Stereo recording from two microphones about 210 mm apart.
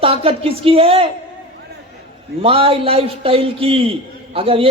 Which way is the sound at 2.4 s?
25° right (ahead or behind).